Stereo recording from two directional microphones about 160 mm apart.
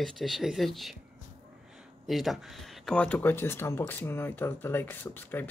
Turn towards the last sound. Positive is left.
turn(degrees=10)  # may be behind; listen again after turning